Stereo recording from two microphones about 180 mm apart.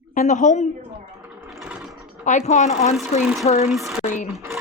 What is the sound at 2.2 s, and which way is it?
Speech, 40° left (ahead or behind).